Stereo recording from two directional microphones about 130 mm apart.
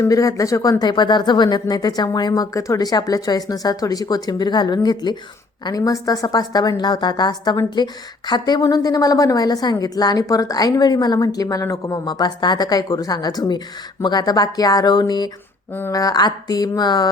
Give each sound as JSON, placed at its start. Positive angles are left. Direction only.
{"t": 0.0, "sound": "a woman's voice", "side_deg": 25}